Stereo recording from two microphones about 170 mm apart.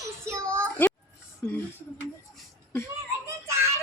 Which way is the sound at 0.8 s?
10° left (ahead or behind).